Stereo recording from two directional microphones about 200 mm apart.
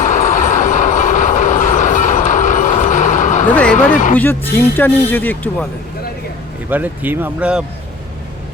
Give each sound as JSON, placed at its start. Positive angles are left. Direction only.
{"t": 0.0, "sound": "vehicle", "side_deg": 40}
{"t": 3.5, "sound": "speech", "side_deg": 5}
{"t": 3.9, "sound": "speech", "side_deg": 40}
{"t": 4.2, "sound": "speech", "side_deg": 10}
{"t": 6.7, "sound": "speech", "side_deg": -10}